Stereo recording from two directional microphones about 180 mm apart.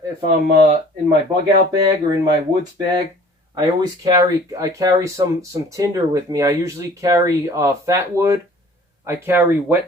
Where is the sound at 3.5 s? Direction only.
20° right (ahead or behind).